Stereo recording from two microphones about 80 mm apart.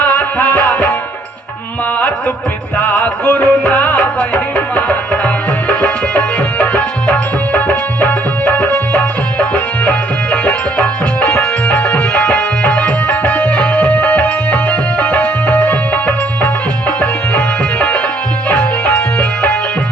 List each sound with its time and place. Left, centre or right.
0.0 s music: left
2.7 s music: left